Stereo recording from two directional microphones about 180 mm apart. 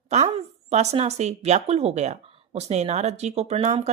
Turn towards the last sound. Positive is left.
turn(degrees=-40)  # may be behind; listen again after turning